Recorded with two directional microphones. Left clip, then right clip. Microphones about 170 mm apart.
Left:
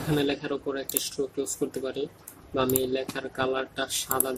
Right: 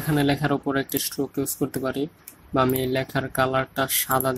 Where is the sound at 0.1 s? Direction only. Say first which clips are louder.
Right 5 dB; 45° right (ahead or behind).